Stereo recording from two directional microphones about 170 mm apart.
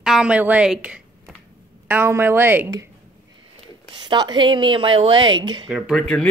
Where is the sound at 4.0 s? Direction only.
25° right (ahead or behind).